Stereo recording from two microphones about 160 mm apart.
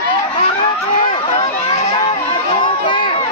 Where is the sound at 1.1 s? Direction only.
35° left (ahead or behind).